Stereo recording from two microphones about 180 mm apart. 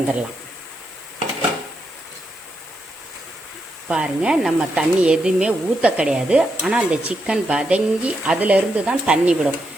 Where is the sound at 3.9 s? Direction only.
5° right (ahead or behind).